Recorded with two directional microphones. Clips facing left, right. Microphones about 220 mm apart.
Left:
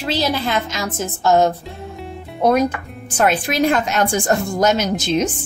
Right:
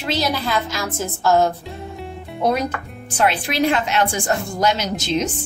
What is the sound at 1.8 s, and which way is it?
Music, centre (ahead or behind).